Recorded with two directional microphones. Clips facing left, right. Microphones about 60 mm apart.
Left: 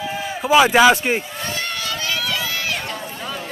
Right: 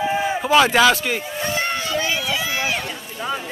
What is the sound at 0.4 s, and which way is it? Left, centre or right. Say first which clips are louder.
Speech: left 3 dB; centre.